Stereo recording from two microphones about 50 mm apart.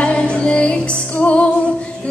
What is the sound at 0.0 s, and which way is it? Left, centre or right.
Music, left.